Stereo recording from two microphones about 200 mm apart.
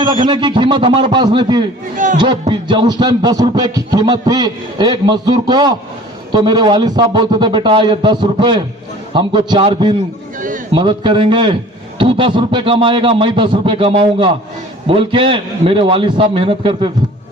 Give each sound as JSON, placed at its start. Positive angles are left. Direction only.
{"t": 0.3, "sound": "music", "side_deg": -25}